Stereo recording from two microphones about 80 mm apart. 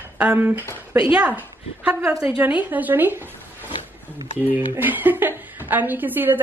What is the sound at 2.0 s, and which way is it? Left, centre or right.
Speech, right.